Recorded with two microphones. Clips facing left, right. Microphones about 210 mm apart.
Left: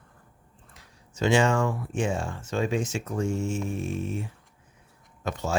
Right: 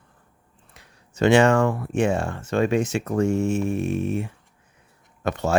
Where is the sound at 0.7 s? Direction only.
65° right (ahead or behind).